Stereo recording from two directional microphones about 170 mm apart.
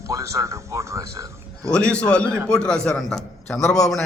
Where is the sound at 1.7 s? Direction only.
5° left (ahead or behind).